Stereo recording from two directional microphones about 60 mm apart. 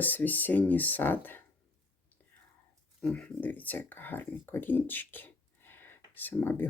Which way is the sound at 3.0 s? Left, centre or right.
Centre.